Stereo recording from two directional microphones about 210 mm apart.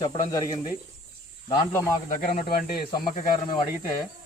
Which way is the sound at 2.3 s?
25° left (ahead or behind).